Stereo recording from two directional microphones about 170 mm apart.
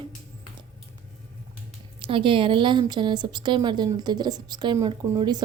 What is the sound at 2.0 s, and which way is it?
A woman's voice, 30° right (ahead or behind).